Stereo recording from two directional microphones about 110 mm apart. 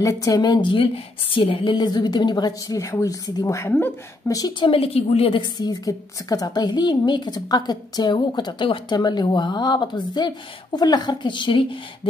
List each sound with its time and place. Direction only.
0.0 s a woman's voice: 30° left (ahead or behind)
4.6 s a woman's voice: 55° left (ahead or behind)
5.6 s a woman's voice: 35° left (ahead or behind)